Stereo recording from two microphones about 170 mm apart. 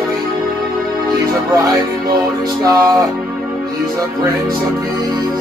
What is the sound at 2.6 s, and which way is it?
Music, 20° right (ahead or behind).